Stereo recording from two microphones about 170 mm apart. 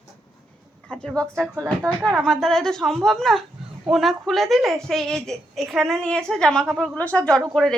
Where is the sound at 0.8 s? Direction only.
5° left (ahead or behind).